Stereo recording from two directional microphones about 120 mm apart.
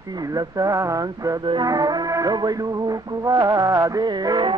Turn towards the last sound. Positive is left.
turn(degrees=-35)  # may be behind; listen again after turning